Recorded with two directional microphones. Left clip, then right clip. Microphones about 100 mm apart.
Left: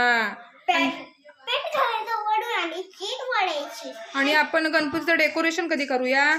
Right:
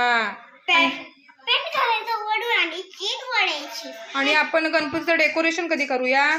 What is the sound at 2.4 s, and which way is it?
A child's voice, 40° left (ahead or behind).